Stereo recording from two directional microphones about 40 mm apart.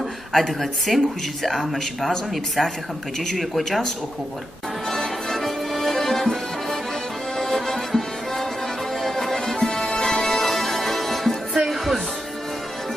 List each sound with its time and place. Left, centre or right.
0.3 s speech: centre
4.8 s music: centre